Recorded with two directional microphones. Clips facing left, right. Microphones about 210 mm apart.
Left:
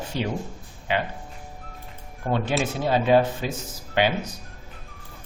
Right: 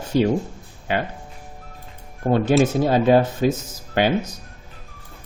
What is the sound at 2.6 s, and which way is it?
Speech, 45° right (ahead or behind).